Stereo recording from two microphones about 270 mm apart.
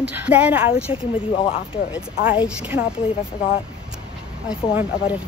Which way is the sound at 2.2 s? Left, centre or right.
Centre.